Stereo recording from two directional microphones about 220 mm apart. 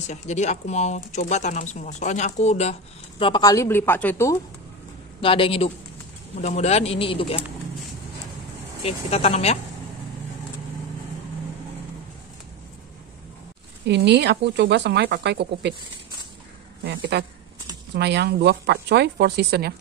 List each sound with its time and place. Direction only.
0.1 s speech: 30° left (ahead or behind); by 4.4 s 10° left (ahead or behind)
5.2 s speech: 25° left (ahead or behind)
8.8 s speech: 25° left (ahead or behind)
13.8 s speech: 50° right (ahead or behind)
16.8 s speech: 50° right (ahead or behind)